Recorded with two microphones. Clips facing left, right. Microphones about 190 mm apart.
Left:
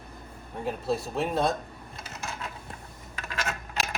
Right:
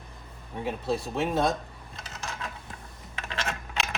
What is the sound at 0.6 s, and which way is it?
Speech, centre (ahead or behind).